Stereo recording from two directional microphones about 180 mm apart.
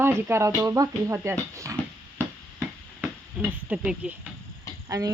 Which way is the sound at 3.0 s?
10° right (ahead or behind).